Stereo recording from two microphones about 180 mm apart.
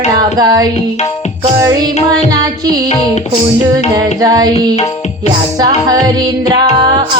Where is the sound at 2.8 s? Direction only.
35° left (ahead or behind).